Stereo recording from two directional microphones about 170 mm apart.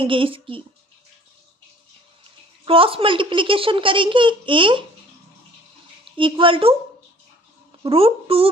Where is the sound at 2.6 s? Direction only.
30° right (ahead or behind).